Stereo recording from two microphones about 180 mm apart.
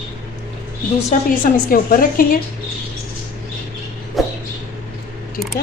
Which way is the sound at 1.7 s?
55° left (ahead or behind).